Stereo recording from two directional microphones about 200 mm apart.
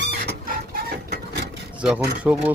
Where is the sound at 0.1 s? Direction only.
45° right (ahead or behind).